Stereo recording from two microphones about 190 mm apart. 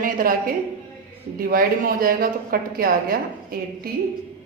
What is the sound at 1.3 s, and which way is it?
A woman's voice, 50° right (ahead or behind).